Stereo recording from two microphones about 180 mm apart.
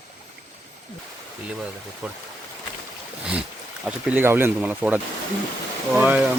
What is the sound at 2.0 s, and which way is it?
Speech, 5° right (ahead or behind).